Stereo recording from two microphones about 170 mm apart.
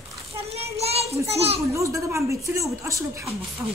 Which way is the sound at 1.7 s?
15° right (ahead or behind).